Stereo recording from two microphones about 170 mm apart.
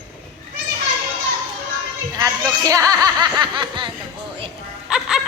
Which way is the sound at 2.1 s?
20° right (ahead or behind).